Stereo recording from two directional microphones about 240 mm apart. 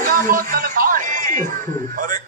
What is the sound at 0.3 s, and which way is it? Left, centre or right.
Music, right.